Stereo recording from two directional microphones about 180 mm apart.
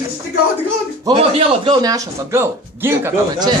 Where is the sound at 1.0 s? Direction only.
30° right (ahead or behind); by 3.1 s 10° right (ahead or behind).